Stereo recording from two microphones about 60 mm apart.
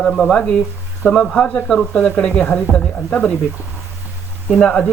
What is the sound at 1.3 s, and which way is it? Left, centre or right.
Speech, centre.